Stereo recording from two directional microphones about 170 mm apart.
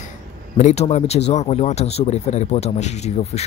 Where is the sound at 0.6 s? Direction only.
40° left (ahead or behind).